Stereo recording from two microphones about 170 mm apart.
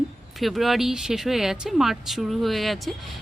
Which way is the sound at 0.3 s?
Centre (ahead or behind).